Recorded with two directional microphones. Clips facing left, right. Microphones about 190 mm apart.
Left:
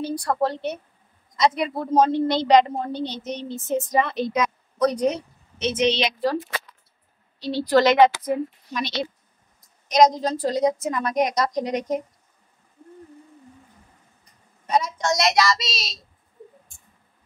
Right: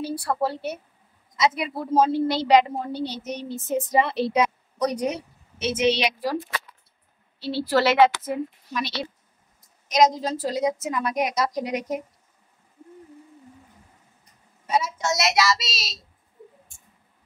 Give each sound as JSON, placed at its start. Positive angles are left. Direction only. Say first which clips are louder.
{"t": 0.0, "sound": "a woman's voice", "louder": "left 2 dB", "side_deg": -5}
{"t": 3.9, "sound": "a woman's voice", "louder": "right 3 dB", "side_deg": -30}
{"t": 4.7, "sound": "a woman's voice", "louder": "left 4 dB", "side_deg": -10}
{"t": 7.4, "sound": "a woman's voice", "louder": "left 3 dB", "side_deg": -10}
{"t": 9.8, "sound": "a woman's voice", "louder": "left 2 dB", "side_deg": -5}
{"t": 14.7, "sound": "a woman's voice", "louder": "left 2 dB", "side_deg": -5}